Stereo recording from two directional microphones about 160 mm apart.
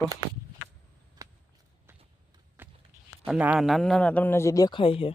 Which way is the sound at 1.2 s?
20° right (ahead or behind).